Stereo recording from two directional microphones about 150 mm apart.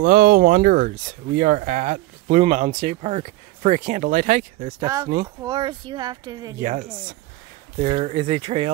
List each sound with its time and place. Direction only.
0.0 s speech: 65° right (ahead or behind)
4.7 s speech: 20° right (ahead or behind)
6.6 s speech: 55° right (ahead or behind)
7.8 s speech: 45° right (ahead or behind)